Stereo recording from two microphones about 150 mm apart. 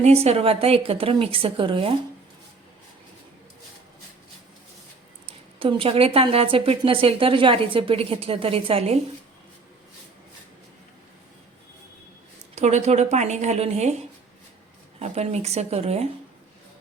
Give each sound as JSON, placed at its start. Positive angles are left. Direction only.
{"t": 0.0, "sound": "a woman's voice", "side_deg": -45}
{"t": 5.5, "sound": "a woman's voice", "side_deg": -35}
{"t": 12.5, "sound": "a woman's voice", "side_deg": -50}
{"t": 14.9, "sound": "a woman's voice", "side_deg": -45}